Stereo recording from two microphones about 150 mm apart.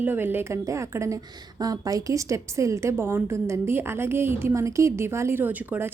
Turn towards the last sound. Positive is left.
turn(degrees=-15)  # may be behind; listen again after turning